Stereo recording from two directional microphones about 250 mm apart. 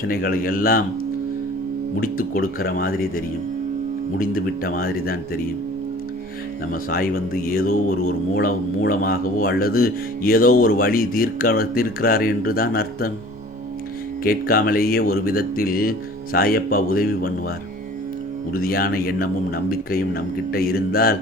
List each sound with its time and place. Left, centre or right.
0.1 s speech: left
2.0 s speech: left
6.7 s speech: left
14.3 s speech: left
18.5 s speech: left